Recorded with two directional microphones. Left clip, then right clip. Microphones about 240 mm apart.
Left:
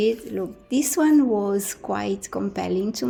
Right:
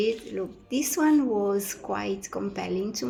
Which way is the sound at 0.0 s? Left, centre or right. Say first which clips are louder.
Left 4 dB; left.